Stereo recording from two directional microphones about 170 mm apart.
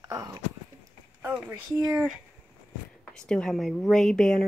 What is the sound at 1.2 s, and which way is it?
Speech, 10° right (ahead or behind).